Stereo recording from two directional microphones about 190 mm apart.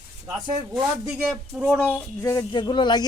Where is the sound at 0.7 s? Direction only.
5° right (ahead or behind).